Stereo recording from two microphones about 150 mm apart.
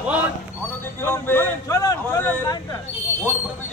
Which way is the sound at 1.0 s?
15° left (ahead or behind).